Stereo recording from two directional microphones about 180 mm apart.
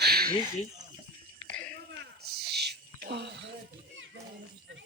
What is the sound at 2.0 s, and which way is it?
Whispering, 65° right (ahead or behind).